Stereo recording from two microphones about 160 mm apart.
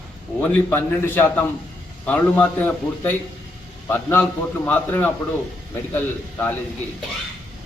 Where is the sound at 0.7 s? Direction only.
10° left (ahead or behind).